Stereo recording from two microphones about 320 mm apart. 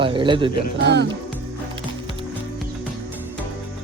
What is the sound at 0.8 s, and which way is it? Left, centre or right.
Speech, right.